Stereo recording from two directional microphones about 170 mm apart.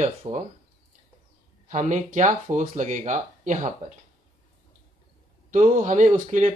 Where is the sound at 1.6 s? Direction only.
45° right (ahead or behind).